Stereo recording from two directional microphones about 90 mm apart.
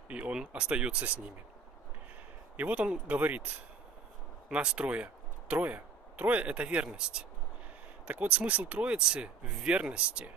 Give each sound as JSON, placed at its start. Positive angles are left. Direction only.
{"t": 0.1, "sound": "speech", "side_deg": -10}
{"t": 2.5, "sound": "speech", "side_deg": -15}